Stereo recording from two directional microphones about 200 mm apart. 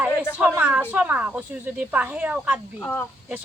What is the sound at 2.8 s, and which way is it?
Speech, 10° left (ahead or behind).